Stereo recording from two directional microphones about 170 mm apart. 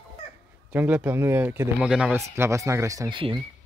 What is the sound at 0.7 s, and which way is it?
Speech, 10° right (ahead or behind).